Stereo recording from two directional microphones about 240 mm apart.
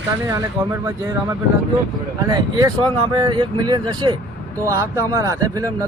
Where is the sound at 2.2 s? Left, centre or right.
Centre.